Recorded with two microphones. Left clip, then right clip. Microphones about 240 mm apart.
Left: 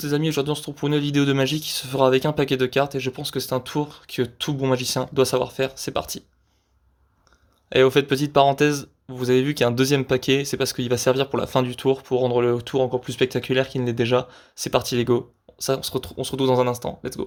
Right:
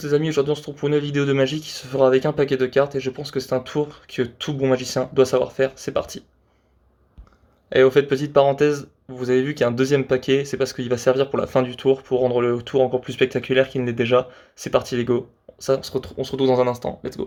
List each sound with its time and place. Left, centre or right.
0.0 s speech: left
7.7 s speech: left